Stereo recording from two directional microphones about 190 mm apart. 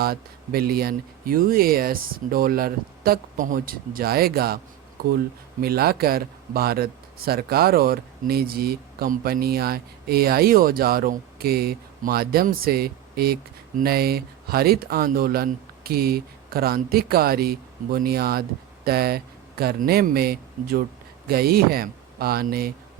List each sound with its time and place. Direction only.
0.0 s speech: 55° right (ahead or behind)
5.6 s speech: 55° right (ahead or behind)